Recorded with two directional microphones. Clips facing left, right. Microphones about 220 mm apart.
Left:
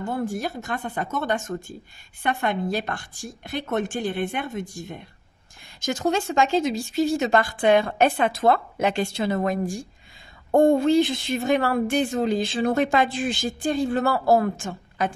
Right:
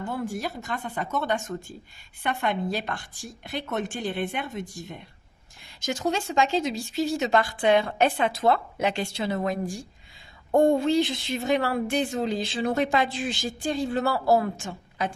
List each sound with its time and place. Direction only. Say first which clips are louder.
0.4 s a woman's voice: left 3 dB; 50° left (ahead or behind)